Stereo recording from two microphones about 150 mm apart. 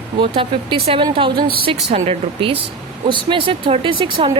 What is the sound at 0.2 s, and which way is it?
Speech, 35° right (ahead or behind).